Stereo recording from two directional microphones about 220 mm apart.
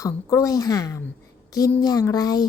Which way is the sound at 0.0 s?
15° left (ahead or behind).